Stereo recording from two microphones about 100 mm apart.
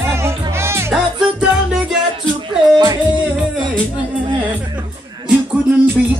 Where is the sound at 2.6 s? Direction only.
45° right (ahead or behind).